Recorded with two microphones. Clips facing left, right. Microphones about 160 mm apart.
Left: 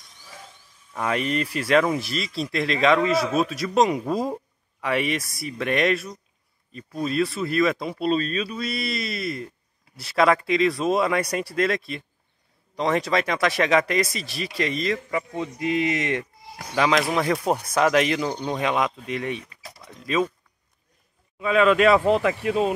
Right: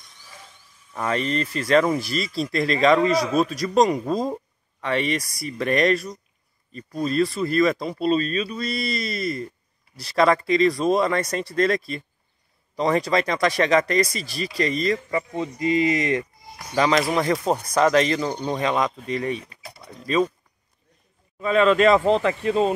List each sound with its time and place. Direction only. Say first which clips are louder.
0.9 s speech: even; 5° left (ahead or behind)
19.5 s a sound: right 2 dB; 35° right (ahead or behind)
20.0 s speech: right 2 dB; centre (ahead or behind)
21.4 s speech: right 1 dB; 5° left (ahead or behind)